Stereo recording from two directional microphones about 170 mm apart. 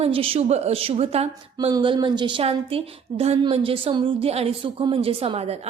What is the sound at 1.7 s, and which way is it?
Speech, 25° right (ahead or behind).